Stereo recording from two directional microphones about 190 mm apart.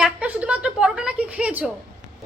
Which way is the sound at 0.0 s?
5° right (ahead or behind).